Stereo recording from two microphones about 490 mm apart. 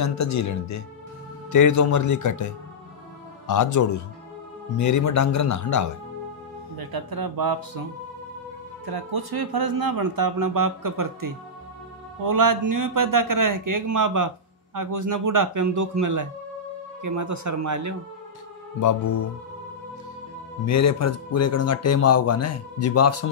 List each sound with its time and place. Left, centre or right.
0.0 s speech: left
6.8 s speech: right
8.8 s a man's voice: right
18.8 s speech: left
20.6 s speech: left